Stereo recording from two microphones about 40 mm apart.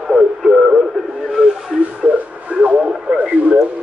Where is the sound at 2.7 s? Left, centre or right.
Right.